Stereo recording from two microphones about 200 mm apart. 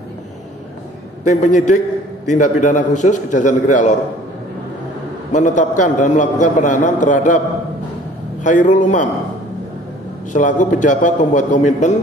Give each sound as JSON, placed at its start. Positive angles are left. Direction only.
{"t": 1.2, "sound": "a man's voice", "side_deg": 35}
{"t": 5.3, "sound": "a man's voice", "side_deg": 40}
{"t": 8.5, "sound": "a man's voice", "side_deg": 40}
{"t": 10.3, "sound": "a man's voice", "side_deg": 40}